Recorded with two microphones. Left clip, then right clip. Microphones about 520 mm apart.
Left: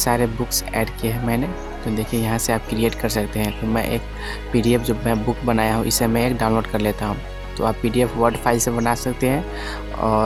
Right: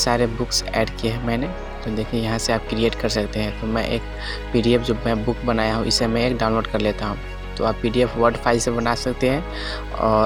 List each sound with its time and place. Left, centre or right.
0.0 s speech: left